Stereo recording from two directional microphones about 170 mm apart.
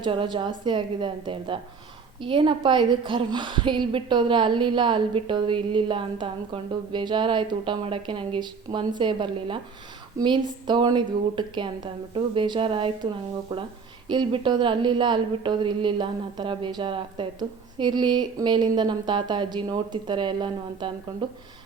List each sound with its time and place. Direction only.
0.0 s a woman's voice: 30° right (ahead or behind)